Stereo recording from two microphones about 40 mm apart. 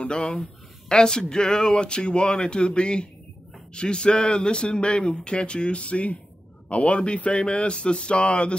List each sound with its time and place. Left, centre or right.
0.0 s speech: left